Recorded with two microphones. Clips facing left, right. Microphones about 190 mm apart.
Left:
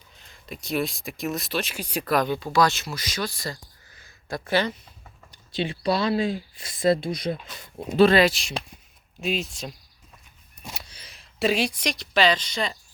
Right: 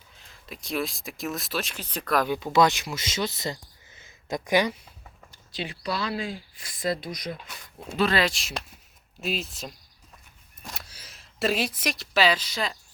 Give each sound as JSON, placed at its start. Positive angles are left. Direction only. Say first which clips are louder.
{"t": 0.2, "sound": "speech", "louder": "left 4 dB", "side_deg": 0}
{"t": 2.1, "sound": "speech", "louder": "even", "side_deg": -10}
{"t": 5.3, "sound": "speech", "louder": "left 7 dB", "side_deg": 25}
{"t": 8.2, "sound": "speech", "louder": "left 6 dB", "side_deg": 0}
{"t": 10.6, "sound": "a sound", "louder": "left 1 dB", "side_deg": 0}